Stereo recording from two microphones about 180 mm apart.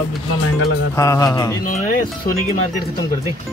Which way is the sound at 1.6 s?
45° left (ahead or behind).